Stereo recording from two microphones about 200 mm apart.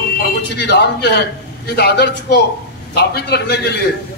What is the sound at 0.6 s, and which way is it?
A man's voice, 55° left (ahead or behind).